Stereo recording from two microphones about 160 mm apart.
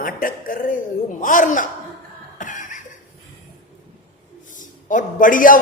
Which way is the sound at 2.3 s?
50° left (ahead or behind).